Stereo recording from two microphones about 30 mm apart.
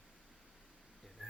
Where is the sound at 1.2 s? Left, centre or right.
Centre.